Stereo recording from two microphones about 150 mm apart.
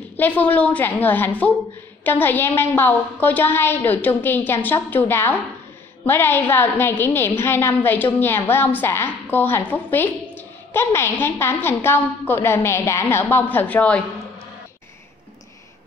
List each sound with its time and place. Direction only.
0.2 s a woman's voice: 10° left (ahead or behind)